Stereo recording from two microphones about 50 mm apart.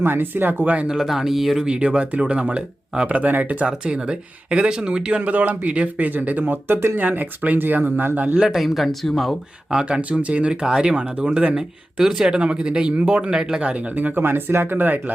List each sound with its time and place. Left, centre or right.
0.0 s speech: right
0.9 s speech: centre
1.6 s speech: centre
3.2 s speech: right
3.7 s speech: centre
5.3 s speech: right
7.0 s speech: right
8.4 s speech: centre
9.6 s speech: centre
10.0 s speech: right
13.3 s speech: centre
13.6 s speech: right
14.2 s speech: right